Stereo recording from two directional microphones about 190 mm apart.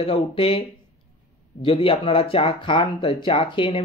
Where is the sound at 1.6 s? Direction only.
30° left (ahead or behind).